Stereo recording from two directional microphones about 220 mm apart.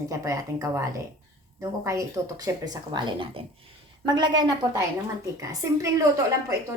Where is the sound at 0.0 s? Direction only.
15° right (ahead or behind).